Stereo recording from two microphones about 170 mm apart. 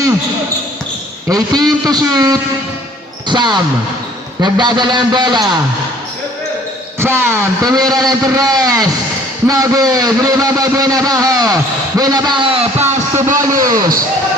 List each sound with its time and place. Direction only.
1.3 s a man's voice: 20° right (ahead or behind)
7.0 s a man's voice: 15° right (ahead or behind)